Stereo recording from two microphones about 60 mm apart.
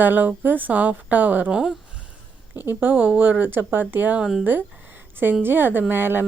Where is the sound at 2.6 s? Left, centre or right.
Right.